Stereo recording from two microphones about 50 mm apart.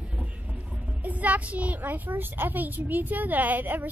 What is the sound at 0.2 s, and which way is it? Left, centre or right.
A woman's voice, right.